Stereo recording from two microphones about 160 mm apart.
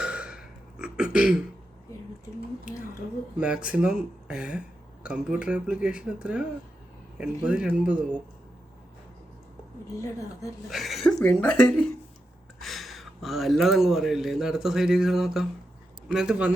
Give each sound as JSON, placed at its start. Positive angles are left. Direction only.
{"t": 0.0, "sound": "throat clearing", "side_deg": -5}
{"t": 3.3, "sound": "speech", "side_deg": -5}
{"t": 10.0, "sound": "a woman's voice", "side_deg": 20}
{"t": 10.7, "sound": "speech", "side_deg": 0}